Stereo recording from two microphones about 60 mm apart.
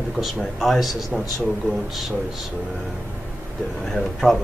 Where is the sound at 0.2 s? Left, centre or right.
Centre.